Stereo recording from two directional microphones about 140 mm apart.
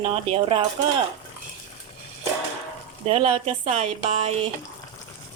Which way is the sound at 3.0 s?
45° right (ahead or behind).